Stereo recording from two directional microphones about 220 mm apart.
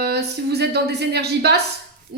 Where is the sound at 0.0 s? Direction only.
45° right (ahead or behind).